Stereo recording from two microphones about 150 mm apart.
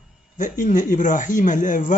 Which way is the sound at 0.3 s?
60° left (ahead or behind).